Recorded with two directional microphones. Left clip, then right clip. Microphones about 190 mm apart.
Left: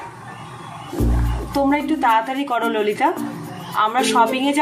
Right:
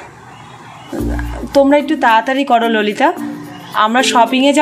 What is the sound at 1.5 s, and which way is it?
Speech, 50° right (ahead or behind).